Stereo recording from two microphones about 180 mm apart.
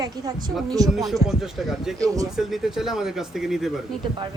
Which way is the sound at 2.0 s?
20° right (ahead or behind).